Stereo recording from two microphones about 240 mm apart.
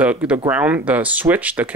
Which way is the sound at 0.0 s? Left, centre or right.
Centre.